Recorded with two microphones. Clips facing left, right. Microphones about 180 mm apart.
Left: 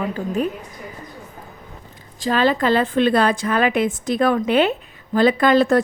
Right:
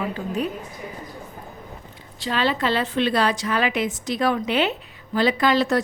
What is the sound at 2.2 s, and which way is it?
A woman's voice, 45° left (ahead or behind).